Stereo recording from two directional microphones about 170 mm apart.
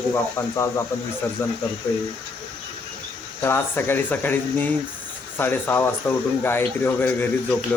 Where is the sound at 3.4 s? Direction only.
15° left (ahead or behind).